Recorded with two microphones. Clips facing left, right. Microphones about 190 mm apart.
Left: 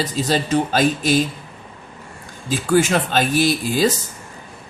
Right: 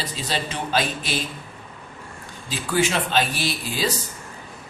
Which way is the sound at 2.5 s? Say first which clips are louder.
Left 6 dB; 45° left (ahead or behind).